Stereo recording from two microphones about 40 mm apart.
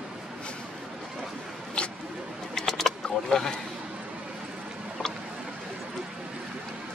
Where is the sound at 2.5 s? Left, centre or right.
Centre.